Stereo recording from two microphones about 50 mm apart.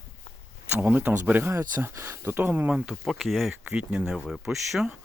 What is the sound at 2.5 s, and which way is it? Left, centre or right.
Speech, right.